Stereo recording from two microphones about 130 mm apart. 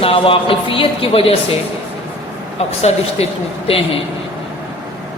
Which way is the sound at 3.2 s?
50° left (ahead or behind).